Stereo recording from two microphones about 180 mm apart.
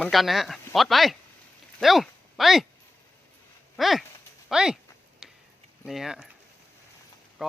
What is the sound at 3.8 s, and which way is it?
Speech, centre (ahead or behind).